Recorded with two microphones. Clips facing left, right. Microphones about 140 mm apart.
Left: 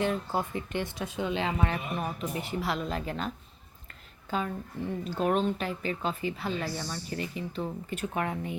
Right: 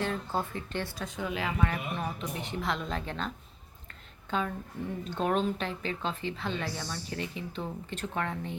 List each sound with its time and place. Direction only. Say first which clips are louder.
0.0 s a woman's voice: left 3 dB; 10° left (ahead or behind); by 1.8 s 25° left (ahead or behind)
2.0 s a woman's voice: left 2 dB; 5° left (ahead or behind)
4.3 s a woman's voice: even; 5° left (ahead or behind)